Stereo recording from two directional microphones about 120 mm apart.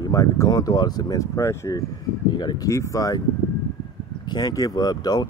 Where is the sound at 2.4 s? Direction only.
35° left (ahead or behind).